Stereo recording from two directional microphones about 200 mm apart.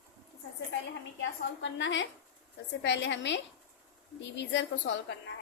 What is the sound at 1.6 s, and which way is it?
A woman's voice, 65° left (ahead or behind).